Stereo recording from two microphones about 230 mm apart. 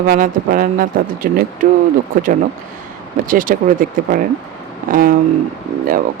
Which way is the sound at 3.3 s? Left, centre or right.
Right.